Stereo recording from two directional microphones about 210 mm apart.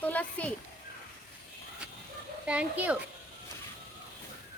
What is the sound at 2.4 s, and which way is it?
Speech, 5° right (ahead or behind).